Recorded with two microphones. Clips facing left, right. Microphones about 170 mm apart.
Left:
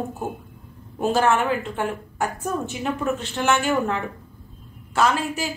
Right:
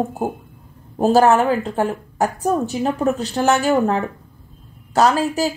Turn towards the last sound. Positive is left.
turn(degrees=-35)  # may be behind; listen again after turning